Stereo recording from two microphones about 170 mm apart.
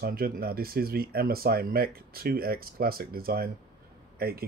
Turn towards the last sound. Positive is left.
turn(degrees=-65)  # may be behind; listen again after turning